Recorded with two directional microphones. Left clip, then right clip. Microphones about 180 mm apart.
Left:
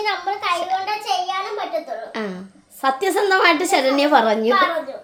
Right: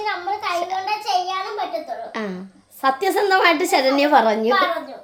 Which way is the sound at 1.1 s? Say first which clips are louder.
Right 1 dB; 20° left (ahead or behind).